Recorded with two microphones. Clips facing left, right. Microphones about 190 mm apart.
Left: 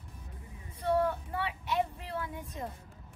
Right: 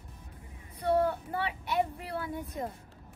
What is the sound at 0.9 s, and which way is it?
Speech, 30° right (ahead or behind).